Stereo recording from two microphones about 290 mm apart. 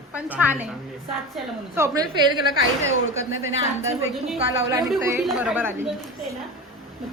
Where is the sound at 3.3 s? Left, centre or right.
Right.